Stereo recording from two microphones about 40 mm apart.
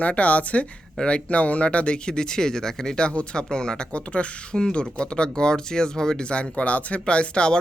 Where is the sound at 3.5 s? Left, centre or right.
Centre.